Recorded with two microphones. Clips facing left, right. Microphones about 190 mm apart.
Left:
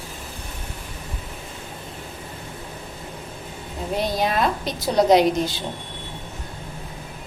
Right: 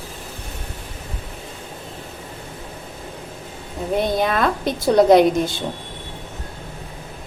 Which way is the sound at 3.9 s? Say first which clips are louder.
Right 3 dB; 55° right (ahead or behind).